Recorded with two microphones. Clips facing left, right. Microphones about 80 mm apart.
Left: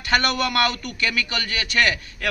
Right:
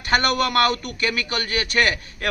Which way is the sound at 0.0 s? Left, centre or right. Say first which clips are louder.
Right 1 dB; right.